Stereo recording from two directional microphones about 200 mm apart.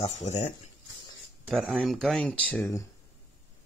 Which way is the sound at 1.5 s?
Centre (ahead or behind).